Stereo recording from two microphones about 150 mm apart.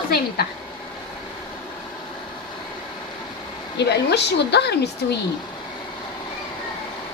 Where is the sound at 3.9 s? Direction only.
90° left.